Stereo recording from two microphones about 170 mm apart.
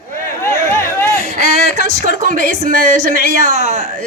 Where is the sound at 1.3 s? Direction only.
70° left (ahead or behind).